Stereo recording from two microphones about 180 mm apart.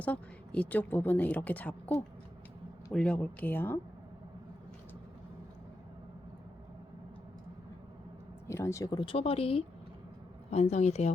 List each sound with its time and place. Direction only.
0.0 s a woman's voice: 5° left (ahead or behind)
8.4 s speech: 15° left (ahead or behind); by 11.1 s 40° left (ahead or behind)